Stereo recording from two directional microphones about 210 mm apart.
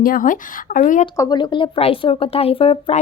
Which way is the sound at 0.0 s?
40° left (ahead or behind).